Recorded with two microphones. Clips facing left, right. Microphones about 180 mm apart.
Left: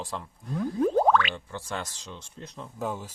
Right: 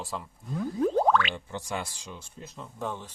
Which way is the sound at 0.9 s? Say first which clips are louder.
Left 2 dB; 50° left (ahead or behind).